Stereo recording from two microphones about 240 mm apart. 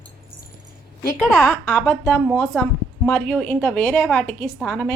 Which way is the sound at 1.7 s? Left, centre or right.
Centre.